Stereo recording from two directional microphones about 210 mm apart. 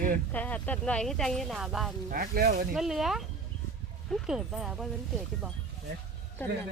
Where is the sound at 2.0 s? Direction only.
45° right (ahead or behind).